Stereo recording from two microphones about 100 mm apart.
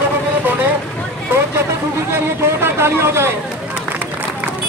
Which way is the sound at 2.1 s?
25° right (ahead or behind).